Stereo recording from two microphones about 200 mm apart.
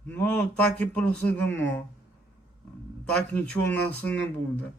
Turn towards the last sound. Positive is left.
turn(degrees=10)  # may be behind; listen again after turning